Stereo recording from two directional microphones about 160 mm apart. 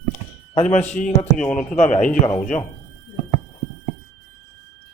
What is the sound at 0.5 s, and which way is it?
Speech, 45° left (ahead or behind).